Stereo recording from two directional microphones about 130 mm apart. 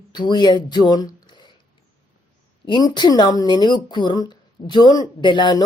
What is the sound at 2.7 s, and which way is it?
Speech, 35° left (ahead or behind).